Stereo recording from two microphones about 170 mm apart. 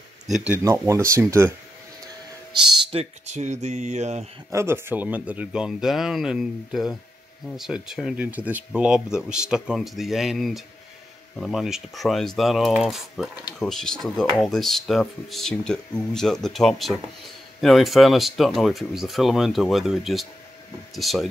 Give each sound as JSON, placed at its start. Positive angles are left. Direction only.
{"t": 0.5, "sound": "speech", "side_deg": -15}
{"t": 2.9, "sound": "speech", "side_deg": -40}
{"t": 4.5, "sound": "speech", "side_deg": -15}